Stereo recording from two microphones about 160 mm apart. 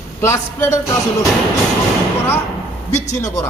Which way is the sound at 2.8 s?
45° left (ahead or behind).